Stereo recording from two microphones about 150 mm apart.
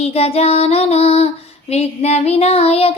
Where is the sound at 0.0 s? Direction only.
40° left (ahead or behind).